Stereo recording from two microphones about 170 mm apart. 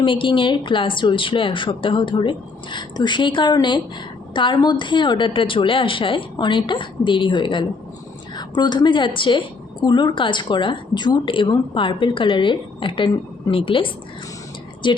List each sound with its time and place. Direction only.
0.0 s a woman's voice: 30° left (ahead or behind)